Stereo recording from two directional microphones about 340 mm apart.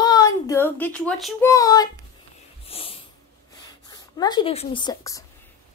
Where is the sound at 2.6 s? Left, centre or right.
Centre.